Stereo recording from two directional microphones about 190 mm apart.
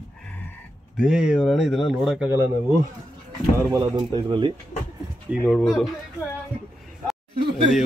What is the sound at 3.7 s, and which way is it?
Speech, 20° right (ahead or behind).